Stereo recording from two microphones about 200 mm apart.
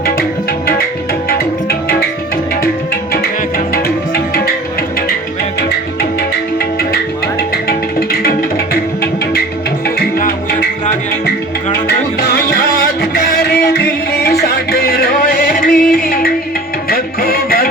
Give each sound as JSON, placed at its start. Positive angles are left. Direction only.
{"t": 3.8, "sound": "music", "side_deg": 50}
{"t": 7.5, "sound": "music", "side_deg": 50}
{"t": 9.8, "sound": "music", "side_deg": 50}